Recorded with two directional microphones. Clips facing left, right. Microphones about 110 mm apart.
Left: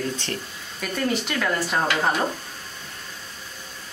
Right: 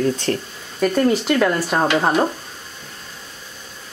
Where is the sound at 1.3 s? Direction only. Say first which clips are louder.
Right 6 dB; 50° right (ahead or behind).